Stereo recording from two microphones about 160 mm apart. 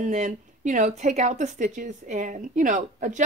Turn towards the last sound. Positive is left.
turn(degrees=-55)  # may be behind; listen again after turning